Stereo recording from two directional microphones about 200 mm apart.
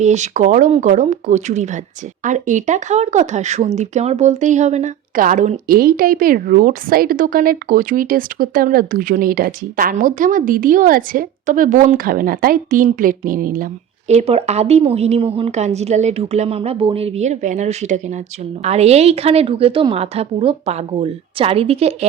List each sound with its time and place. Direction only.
0.0 s a woman's voice: 35° right (ahead or behind)
14.1 s a woman's voice: 30° right (ahead or behind)